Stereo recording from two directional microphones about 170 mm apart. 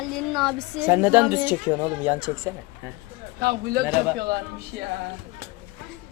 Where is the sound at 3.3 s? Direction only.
65° right (ahead or behind).